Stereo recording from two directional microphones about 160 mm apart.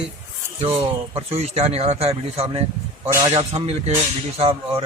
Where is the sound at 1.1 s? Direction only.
40° right (ahead or behind).